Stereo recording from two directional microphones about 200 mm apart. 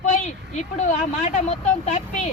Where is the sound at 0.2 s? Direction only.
35° left (ahead or behind).